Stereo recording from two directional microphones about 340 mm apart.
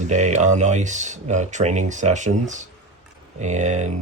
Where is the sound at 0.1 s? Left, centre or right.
Right.